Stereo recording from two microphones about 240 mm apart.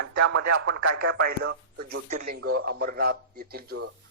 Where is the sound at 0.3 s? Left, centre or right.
Right.